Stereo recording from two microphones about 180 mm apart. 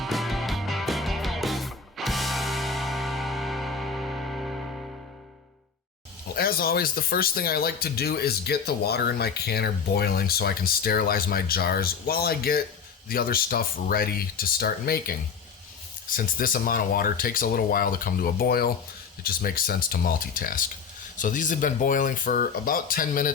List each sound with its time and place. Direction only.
0.0 s music: centre (ahead or behind)
6.3 s speech: 55° left (ahead or behind)